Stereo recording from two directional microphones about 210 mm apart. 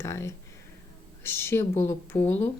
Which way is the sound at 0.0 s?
10° left (ahead or behind).